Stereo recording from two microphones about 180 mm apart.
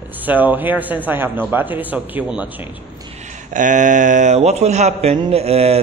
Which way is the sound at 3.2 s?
45° right (ahead or behind).